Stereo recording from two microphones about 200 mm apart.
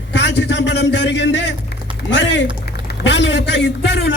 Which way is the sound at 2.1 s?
65° left (ahead or behind).